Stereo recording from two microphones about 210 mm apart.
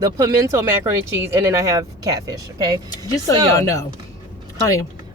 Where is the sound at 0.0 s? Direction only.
15° right (ahead or behind).